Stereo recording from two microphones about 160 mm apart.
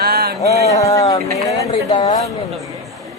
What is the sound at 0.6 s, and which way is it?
Speech, 20° left (ahead or behind).